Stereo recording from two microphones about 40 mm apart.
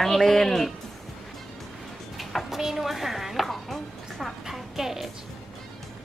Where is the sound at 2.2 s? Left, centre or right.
Centre.